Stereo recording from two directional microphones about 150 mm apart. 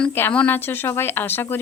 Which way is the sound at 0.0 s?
15° left (ahead or behind).